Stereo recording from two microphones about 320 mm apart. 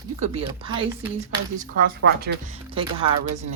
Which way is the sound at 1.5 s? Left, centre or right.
Right.